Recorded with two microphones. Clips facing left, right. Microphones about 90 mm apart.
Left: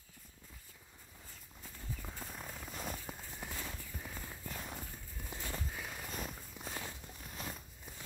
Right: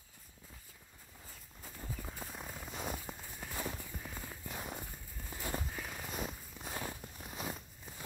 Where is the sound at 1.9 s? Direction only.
5° right (ahead or behind).